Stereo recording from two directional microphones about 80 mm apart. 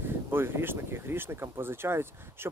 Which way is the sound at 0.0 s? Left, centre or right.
Right.